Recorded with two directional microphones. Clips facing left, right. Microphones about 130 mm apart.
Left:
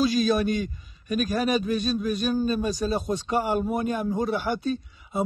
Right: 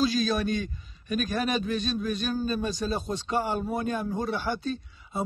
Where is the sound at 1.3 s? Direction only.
5° left (ahead or behind).